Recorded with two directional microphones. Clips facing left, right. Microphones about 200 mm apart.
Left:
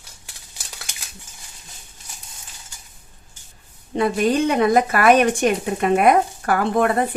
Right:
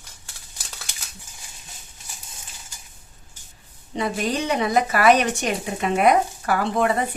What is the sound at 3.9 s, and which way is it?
A woman's voice, 55° left (ahead or behind).